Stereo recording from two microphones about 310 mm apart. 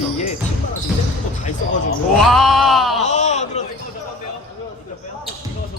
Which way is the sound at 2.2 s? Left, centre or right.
Centre.